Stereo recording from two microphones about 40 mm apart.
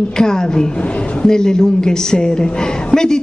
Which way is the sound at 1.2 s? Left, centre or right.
Centre.